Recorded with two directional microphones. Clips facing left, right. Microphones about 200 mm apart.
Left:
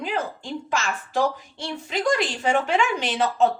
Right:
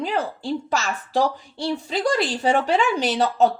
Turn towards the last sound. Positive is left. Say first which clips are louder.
# right 2 dB
turn(degrees=-35)  # may be behind; listen again after turning